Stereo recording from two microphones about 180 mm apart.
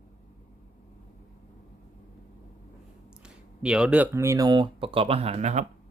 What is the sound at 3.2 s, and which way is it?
Speech, 5° right (ahead or behind).